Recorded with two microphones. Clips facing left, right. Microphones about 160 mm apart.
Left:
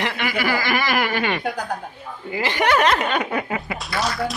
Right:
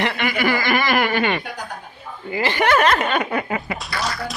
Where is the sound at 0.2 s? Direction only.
5° left (ahead or behind).